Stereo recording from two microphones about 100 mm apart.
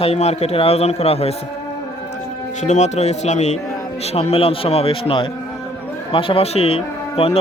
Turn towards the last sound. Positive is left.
turn(degrees=80)